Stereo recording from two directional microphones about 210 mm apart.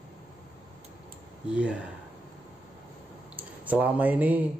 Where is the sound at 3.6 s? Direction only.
10° right (ahead or behind).